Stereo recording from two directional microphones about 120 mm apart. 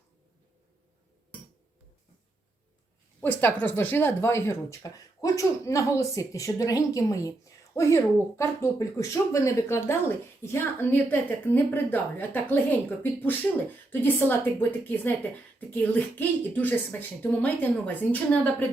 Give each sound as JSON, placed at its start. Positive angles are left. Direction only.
{"t": 3.2, "sound": "a woman's voice", "side_deg": 15}